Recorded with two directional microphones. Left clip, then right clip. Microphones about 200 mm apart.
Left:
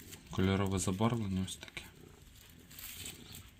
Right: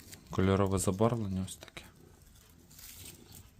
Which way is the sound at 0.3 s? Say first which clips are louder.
Right 5 dB; 35° right (ahead or behind).